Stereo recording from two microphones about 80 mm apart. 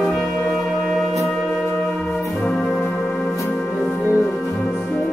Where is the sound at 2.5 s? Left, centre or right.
Centre.